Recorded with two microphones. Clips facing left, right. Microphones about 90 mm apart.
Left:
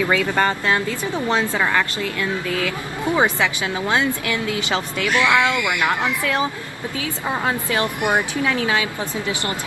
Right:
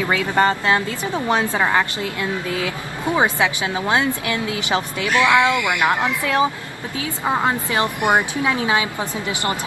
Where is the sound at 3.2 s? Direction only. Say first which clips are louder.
Right 1 dB; 20° right (ahead or behind).